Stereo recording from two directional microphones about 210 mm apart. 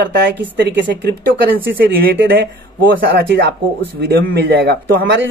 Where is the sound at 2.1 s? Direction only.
55° right (ahead or behind).